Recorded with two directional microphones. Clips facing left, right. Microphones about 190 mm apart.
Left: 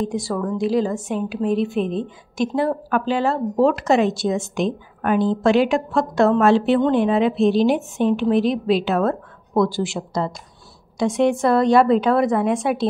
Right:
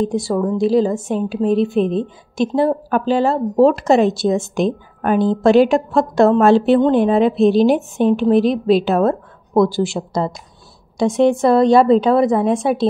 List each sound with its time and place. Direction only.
0.0 s a woman's voice: 25° right (ahead or behind)